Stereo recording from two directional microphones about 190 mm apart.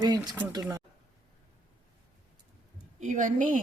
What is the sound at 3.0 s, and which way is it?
Speech, 40° right (ahead or behind).